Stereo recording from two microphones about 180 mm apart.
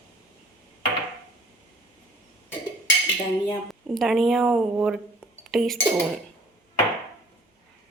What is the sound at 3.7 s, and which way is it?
Speech, centre (ahead or behind).